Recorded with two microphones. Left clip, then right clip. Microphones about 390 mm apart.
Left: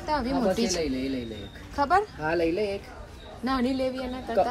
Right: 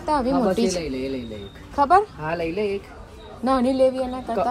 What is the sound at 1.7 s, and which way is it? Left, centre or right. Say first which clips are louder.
Speech: right 6 dB; right.